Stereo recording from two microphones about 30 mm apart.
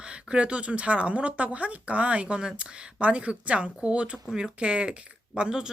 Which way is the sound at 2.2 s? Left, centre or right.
Right.